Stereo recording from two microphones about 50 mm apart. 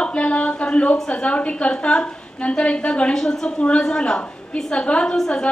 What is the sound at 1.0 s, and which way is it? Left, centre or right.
A woman's voice, left.